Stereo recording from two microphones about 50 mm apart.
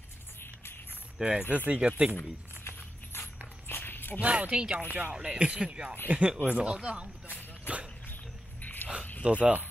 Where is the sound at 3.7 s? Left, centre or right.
Left.